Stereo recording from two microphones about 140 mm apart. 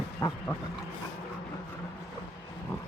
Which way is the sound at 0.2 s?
25° left (ahead or behind).